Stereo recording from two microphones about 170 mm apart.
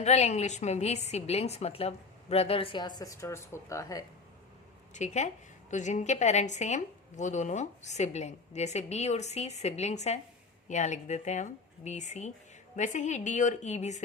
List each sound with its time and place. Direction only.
0.0 s a woman's voice: 40° left (ahead or behind); by 4.0 s 20° left (ahead or behind)
4.9 s a woman's voice: 45° left (ahead or behind)